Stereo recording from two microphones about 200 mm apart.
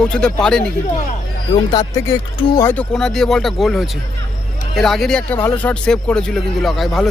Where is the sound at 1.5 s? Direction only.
20° left (ahead or behind).